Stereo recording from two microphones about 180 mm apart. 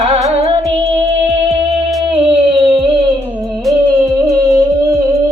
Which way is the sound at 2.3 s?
25° right (ahead or behind).